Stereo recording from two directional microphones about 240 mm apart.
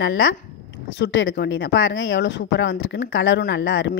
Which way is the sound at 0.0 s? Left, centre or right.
Left.